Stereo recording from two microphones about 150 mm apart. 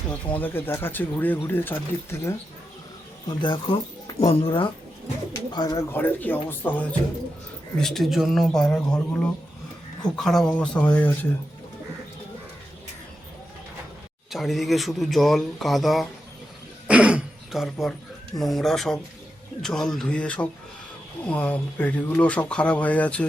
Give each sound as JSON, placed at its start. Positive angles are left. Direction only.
{"t": 0.3, "sound": "speech", "side_deg": 10}
{"t": 3.2, "sound": "speech", "side_deg": 35}
{"t": 5.9, "sound": "speech", "side_deg": 10}
{"t": 14.3, "sound": "speech", "side_deg": 0}
{"t": 16.8, "sound": "throat clearing", "side_deg": -10}
{"t": 18.3, "sound": "speech", "side_deg": 0}